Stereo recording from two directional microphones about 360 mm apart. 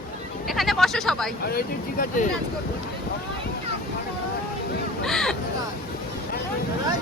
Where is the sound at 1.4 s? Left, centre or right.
Left.